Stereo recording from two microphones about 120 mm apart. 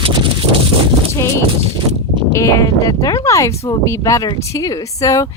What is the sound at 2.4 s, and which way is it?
Speech, 30° left (ahead or behind).